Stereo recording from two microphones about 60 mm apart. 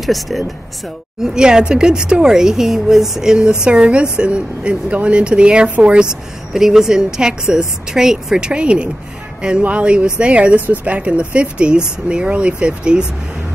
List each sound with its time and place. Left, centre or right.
0.0 s speech: centre
1.2 s speech: centre
6.5 s speech: centre